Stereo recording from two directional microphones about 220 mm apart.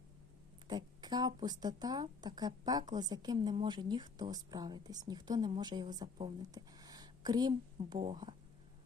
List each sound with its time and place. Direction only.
0.7 s a woman's voice: 20° right (ahead or behind)